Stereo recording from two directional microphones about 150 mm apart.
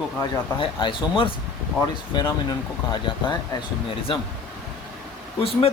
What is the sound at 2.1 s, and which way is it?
Speech, 30° left (ahead or behind).